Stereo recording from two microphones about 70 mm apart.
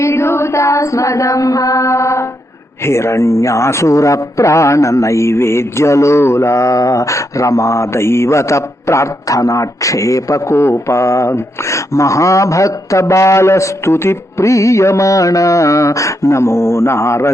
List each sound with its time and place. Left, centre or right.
0.0 s mantra: left
2.8 s a man's voice: left